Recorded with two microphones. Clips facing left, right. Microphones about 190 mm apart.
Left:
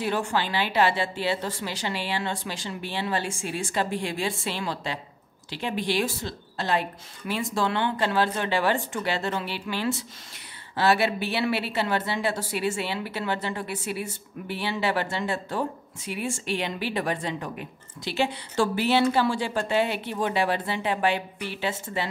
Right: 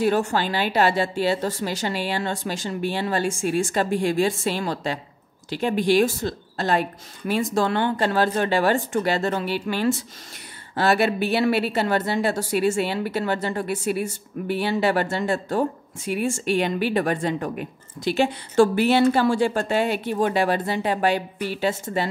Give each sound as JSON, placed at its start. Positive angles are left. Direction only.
{"t": 0.0, "sound": "a woman's voice", "side_deg": -45}